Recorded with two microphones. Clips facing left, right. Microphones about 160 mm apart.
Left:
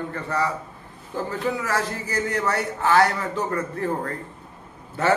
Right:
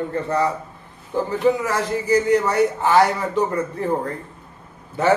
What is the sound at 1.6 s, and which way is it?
A man's voice, 15° right (ahead or behind).